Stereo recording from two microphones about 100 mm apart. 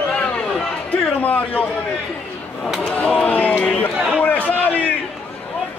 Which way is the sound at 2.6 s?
5° left (ahead or behind).